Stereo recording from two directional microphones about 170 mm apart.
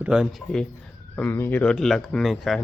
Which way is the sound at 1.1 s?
10° left (ahead or behind).